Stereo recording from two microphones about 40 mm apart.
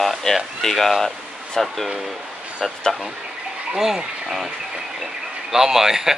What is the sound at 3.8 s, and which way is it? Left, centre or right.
Speech, centre.